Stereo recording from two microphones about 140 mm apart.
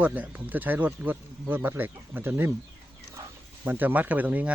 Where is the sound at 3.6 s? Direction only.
15° right (ahead or behind).